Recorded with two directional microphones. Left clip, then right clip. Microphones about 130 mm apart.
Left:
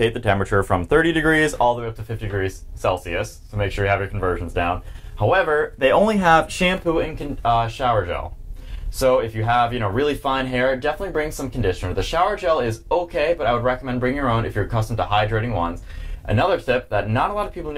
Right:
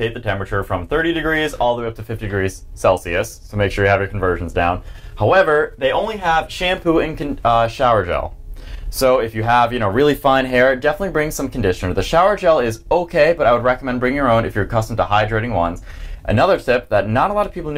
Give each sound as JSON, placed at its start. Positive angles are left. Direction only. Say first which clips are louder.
{"t": 0.0, "sound": "speech", "louder": "left 2 dB", "side_deg": 40}
{"t": 1.8, "sound": "speech", "louder": "right 5 dB", "side_deg": -35}
{"t": 3.9, "sound": "speech", "louder": "right 4 dB", "side_deg": -25}
{"t": 6.8, "sound": "speech", "louder": "right 5 dB", "side_deg": -40}
{"t": 10.0, "sound": "speech", "louder": "right 9 dB", "side_deg": -45}